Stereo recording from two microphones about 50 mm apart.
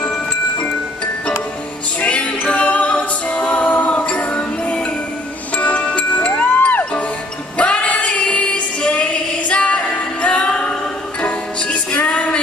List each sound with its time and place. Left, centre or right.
2.0 s music: left
2.9 s a capella: left
4.3 s music: left